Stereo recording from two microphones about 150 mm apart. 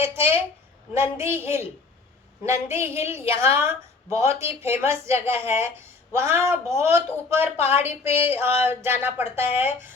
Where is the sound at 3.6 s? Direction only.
20° right (ahead or behind).